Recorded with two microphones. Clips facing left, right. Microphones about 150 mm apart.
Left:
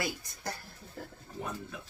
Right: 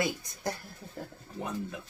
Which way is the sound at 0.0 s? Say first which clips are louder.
Right 5 dB; 20° right (ahead or behind).